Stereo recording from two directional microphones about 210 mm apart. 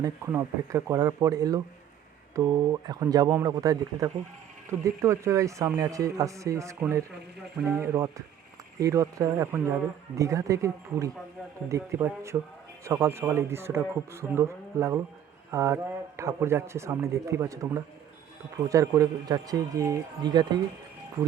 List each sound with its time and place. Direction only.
0.0 s a man's voice: 15° right (ahead or behind)